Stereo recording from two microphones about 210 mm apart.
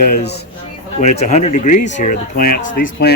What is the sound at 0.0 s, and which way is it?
Speech, 50° left (ahead or behind).